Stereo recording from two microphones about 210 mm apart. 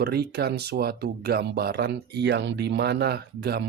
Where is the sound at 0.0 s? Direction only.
50° right (ahead or behind).